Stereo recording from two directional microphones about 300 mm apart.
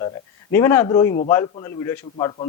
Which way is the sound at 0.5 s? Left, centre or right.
Centre.